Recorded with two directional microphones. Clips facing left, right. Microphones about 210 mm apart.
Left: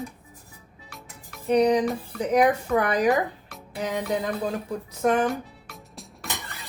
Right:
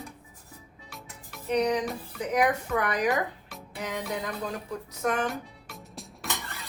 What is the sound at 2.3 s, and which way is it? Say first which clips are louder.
Speech: left 5 dB; 35° left (ahead or behind).